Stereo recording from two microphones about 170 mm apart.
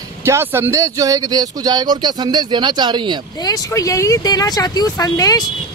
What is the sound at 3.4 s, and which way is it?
Speech, 20° left (ahead or behind).